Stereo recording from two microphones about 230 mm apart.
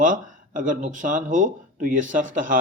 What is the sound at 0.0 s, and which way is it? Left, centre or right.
A man's voice, right.